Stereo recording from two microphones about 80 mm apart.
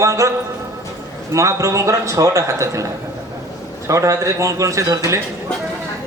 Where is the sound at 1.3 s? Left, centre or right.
Right.